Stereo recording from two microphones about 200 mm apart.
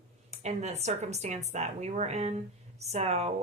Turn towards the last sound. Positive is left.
turn(degrees=-30)  # may be behind; listen again after turning